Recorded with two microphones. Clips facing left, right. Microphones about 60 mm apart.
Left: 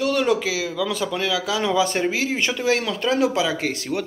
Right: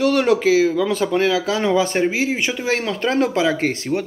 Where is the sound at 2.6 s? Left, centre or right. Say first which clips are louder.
Even; right.